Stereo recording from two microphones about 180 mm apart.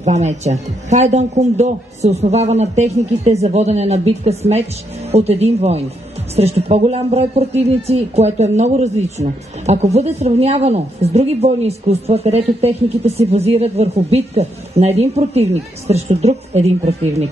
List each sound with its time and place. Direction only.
0.0 s speech: 40° right (ahead or behind)